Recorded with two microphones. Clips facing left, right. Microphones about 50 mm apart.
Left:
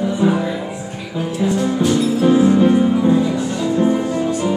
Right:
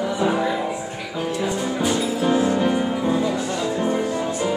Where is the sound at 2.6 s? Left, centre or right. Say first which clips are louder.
Left 7 dB; centre.